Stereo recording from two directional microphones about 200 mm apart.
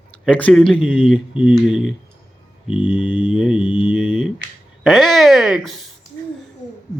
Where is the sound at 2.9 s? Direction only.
5° right (ahead or behind).